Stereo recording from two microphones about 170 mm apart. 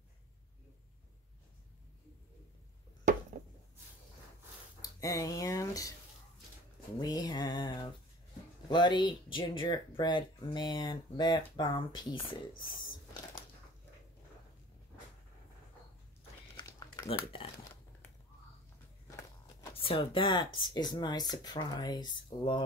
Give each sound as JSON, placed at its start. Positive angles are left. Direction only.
{"t": 5.0, "sound": "speech", "side_deg": 20}
{"t": 7.0, "sound": "a sound", "side_deg": 25}
{"t": 8.6, "sound": "speech", "side_deg": 25}
{"t": 16.5, "sound": "crumpling", "side_deg": 20}
{"t": 19.6, "sound": "speech", "side_deg": 30}